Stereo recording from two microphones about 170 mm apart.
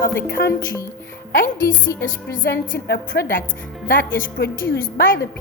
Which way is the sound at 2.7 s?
70° left (ahead or behind).